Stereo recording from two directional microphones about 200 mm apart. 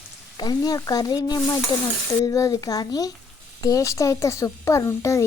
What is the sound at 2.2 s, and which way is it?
A child's voice, 15° left (ahead or behind).